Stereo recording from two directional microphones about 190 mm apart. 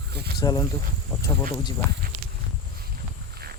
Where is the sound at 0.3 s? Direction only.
20° left (ahead or behind).